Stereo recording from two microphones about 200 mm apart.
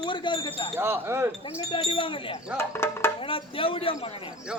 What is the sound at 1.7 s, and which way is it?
Speech, 25° left (ahead or behind).